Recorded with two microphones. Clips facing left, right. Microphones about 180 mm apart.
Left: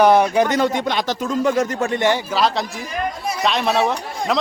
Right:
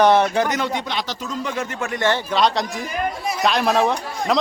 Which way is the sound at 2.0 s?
10° left (ahead or behind).